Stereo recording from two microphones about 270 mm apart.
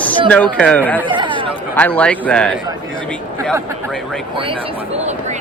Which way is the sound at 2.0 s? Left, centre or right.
Centre.